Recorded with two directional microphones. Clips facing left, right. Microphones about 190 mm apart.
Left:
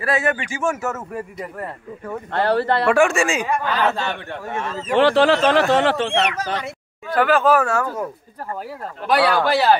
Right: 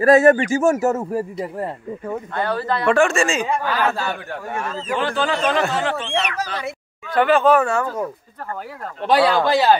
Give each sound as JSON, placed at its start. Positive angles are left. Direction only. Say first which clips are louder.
{"t": 0.0, "sound": "a man's voice", "louder": "right 9 dB", "side_deg": -40}
{"t": 2.3, "sound": "speech", "louder": "left 5 dB", "side_deg": 70}
{"t": 2.9, "sound": "speech", "louder": "right 2 dB", "side_deg": 10}
{"t": 3.6, "sound": "speech", "louder": "even", "side_deg": -10}
{"t": 4.9, "sound": "speech", "louder": "left 7 dB", "side_deg": 75}
{"t": 7.2, "sound": "speech", "louder": "right 1 dB", "side_deg": 0}
{"t": 9.0, "sound": "speech", "louder": "right 1 dB", "side_deg": -25}